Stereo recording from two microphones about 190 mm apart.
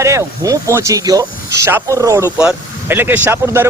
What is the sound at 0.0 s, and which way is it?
Speech, 15° right (ahead or behind).